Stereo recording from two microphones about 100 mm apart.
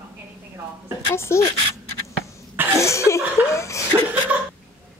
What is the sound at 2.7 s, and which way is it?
Speech, 30° left (ahead or behind).